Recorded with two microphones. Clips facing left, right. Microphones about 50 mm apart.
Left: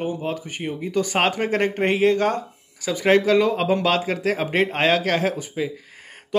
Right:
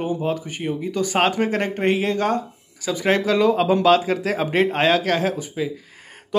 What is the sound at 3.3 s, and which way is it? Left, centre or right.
Speech, left.